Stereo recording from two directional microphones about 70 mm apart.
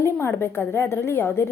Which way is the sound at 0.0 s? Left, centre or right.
Left.